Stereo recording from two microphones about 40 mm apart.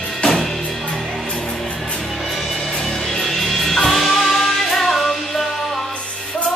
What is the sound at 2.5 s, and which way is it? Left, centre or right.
Music, left.